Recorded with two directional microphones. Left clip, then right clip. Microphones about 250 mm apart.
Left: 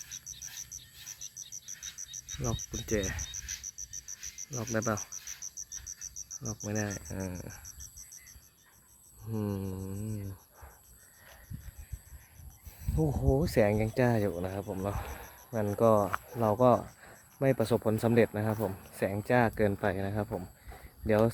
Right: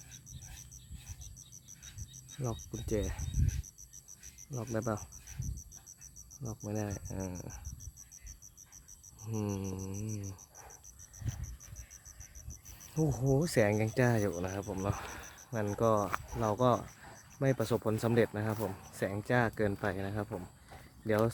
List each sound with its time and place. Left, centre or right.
0.1 s a sound: right
1.8 s cricket: right
2.8 s speech: centre
3.3 s insect: right
3.7 s frog: right
4.5 s speech: centre
5.4 s cricket: right
6.7 s speech: centre
9.2 s mantra: centre
13.1 s speech: centre